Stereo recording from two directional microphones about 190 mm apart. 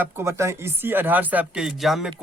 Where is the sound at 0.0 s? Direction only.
15° right (ahead or behind).